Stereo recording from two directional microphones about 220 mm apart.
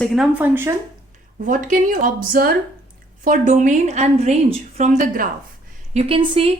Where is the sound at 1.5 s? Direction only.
35° right (ahead or behind).